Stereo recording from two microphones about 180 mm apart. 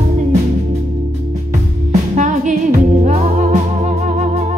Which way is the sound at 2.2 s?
45° right (ahead or behind).